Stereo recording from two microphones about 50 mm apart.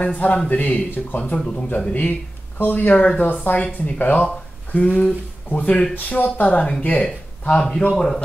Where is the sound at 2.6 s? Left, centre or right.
Left.